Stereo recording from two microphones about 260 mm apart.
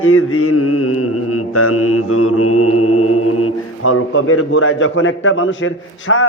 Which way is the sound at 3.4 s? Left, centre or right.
Left.